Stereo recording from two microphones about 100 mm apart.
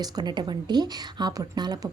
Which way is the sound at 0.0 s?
45° right (ahead or behind).